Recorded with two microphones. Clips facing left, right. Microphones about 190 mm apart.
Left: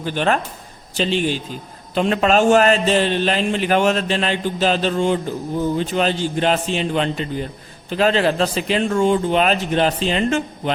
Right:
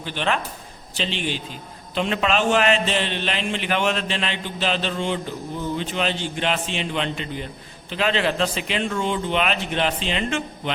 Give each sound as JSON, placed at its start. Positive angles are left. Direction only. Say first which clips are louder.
{"t": 0.0, "sound": "a man's voice", "louder": "left 5 dB", "side_deg": 45}